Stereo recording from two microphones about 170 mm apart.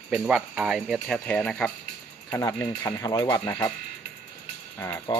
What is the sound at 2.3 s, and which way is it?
Speech, 15° left (ahead or behind).